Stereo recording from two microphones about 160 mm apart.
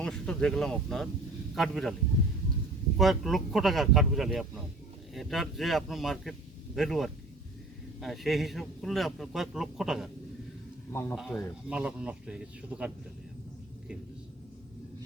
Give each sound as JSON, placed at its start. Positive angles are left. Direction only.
{"t": 0.0, "sound": "a man's voice", "side_deg": 5}
{"t": 3.0, "sound": "a man's voice", "side_deg": 0}
{"t": 10.9, "sound": "speech", "side_deg": 15}
{"t": 11.2, "sound": "a man's voice", "side_deg": 0}